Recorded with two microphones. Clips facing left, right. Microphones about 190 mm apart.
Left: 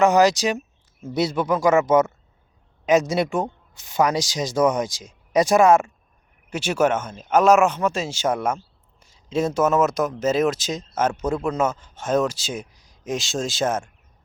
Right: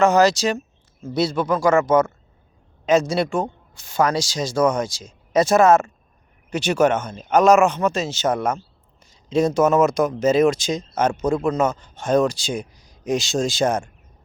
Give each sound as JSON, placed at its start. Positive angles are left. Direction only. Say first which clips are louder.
{"t": 0.0, "sound": "speech", "louder": "right 1 dB", "side_deg": 15}